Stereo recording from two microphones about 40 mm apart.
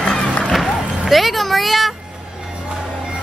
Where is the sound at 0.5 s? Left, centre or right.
Centre.